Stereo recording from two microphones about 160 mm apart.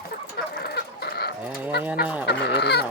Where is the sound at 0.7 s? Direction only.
90° left.